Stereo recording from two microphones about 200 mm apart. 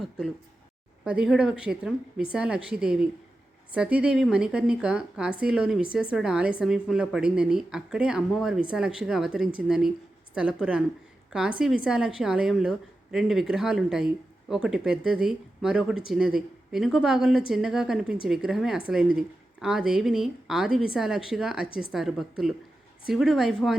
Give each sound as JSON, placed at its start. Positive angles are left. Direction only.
{"t": 1.0, "sound": "a woman's voice", "side_deg": -5}